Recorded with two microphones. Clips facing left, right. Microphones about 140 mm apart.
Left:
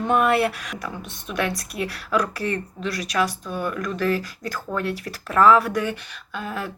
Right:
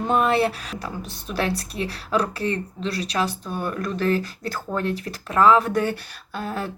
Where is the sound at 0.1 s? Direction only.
25° right (ahead or behind).